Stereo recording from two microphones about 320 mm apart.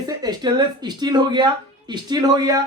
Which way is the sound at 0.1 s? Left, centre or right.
Centre.